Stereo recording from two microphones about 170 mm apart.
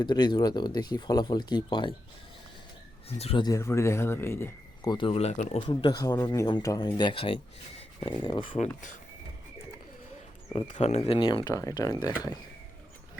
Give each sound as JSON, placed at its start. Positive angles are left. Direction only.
{"t": 0.0, "sound": "speech", "side_deg": 25}
{"t": 3.2, "sound": "speech", "side_deg": 35}
{"t": 3.4, "sound": "speech", "side_deg": 20}
{"t": 5.5, "sound": "speech", "side_deg": 30}
{"t": 8.5, "sound": "speech", "side_deg": 45}
{"t": 10.5, "sound": "speech", "side_deg": 35}